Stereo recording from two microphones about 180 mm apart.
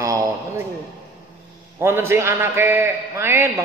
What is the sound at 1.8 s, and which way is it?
A man's voice, 15° right (ahead or behind).